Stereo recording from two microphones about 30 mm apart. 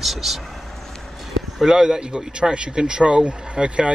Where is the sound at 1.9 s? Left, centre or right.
Right.